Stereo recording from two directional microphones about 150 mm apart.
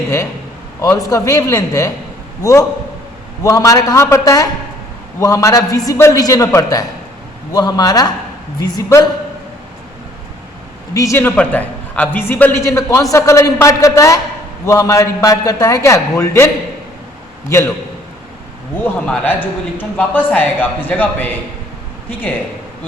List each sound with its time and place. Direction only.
0.8 s a man's voice: 20° left (ahead or behind)
10.9 s a man's voice: 20° left (ahead or behind)
18.8 s a man's voice: 10° left (ahead or behind)